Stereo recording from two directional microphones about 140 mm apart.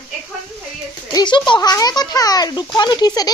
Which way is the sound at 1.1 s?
30° left (ahead or behind).